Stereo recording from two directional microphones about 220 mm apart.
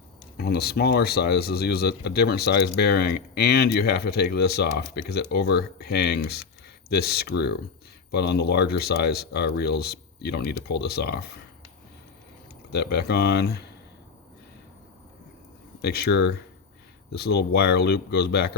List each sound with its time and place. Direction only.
0.3 s speech: 45° left (ahead or behind)
12.7 s speech: 50° left (ahead or behind)
15.8 s speech: 45° left (ahead or behind)